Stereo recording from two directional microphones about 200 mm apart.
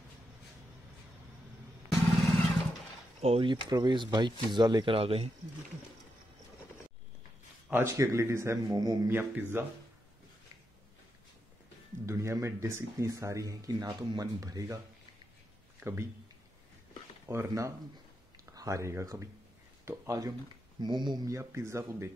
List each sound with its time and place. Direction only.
3.2 s speech: 30° right (ahead or behind)
7.7 s speech: 15° right (ahead or behind)
12.1 s speech: 15° right (ahead or behind)
15.8 s speech: 15° right (ahead or behind)
17.3 s speech: 15° right (ahead or behind)